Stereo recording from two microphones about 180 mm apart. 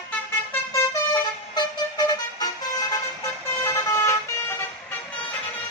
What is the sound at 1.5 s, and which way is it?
Vehicle, 25° left (ahead or behind).